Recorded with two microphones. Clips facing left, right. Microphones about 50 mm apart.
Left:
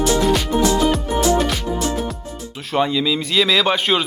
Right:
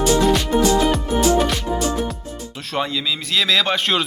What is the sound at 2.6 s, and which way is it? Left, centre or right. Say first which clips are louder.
Speech: left 5 dB; centre.